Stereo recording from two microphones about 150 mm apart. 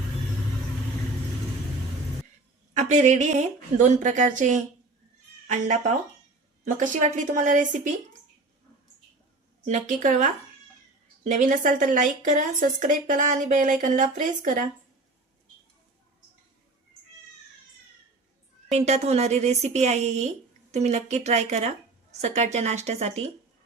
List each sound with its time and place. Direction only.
2.7 s a woman's voice: 50° right (ahead or behind)
9.6 s a woman's voice: 55° right (ahead or behind)
18.7 s speech: 45° right (ahead or behind)